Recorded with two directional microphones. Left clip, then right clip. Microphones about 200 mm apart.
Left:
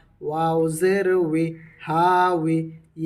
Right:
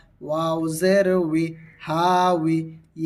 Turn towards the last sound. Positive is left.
turn(degrees=-20)  # may be behind; listen again after turning